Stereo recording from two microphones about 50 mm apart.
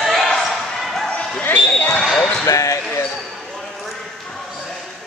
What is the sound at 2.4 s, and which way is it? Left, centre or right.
Basketball bounce, left.